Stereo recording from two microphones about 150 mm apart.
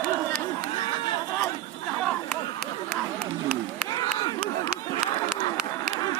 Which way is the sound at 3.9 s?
30° left (ahead or behind).